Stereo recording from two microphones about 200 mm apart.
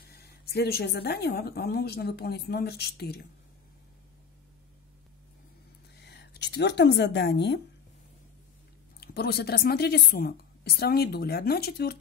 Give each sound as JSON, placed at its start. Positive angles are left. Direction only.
{"t": 0.0, "sound": "speech", "side_deg": 55}
{"t": 6.0, "sound": "speech", "side_deg": 55}
{"t": 9.0, "sound": "speech", "side_deg": 50}